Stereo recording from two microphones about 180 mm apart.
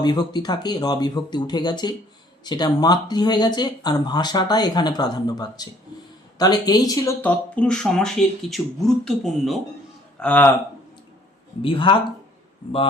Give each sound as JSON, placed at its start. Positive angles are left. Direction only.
{"t": 0.0, "sound": "speech", "side_deg": 25}
{"t": 11.6, "sound": "speech", "side_deg": 30}